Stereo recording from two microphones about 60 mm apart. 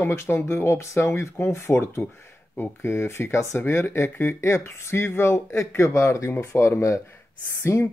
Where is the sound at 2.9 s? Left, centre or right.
Left.